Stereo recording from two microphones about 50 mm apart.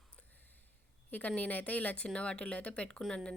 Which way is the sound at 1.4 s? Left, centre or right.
Left.